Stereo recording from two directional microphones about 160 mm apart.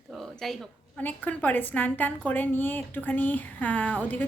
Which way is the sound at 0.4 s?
Centre (ahead or behind).